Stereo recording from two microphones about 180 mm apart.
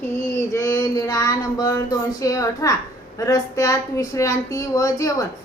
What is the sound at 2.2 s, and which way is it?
A woman's voice, 20° left (ahead or behind).